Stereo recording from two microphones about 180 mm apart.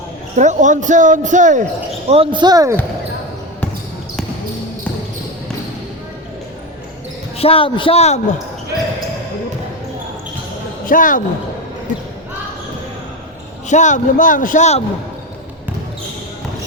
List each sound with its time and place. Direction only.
0.3 s a man's voice: 40° right (ahead or behind)
2.0 s speech: 30° right (ahead or behind)
7.3 s a man's voice: 30° left (ahead or behind)
10.8 s speech: 45° left (ahead or behind)
13.7 s a man's voice: 40° left (ahead or behind)